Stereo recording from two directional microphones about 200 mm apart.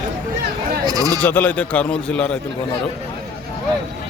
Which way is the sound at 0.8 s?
20° right (ahead or behind).